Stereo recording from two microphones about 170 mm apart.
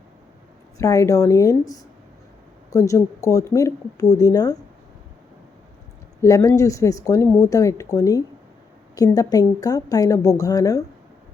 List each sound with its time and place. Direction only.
0.8 s speech: 20° left (ahead or behind)
6.2 s speech: 20° left (ahead or behind)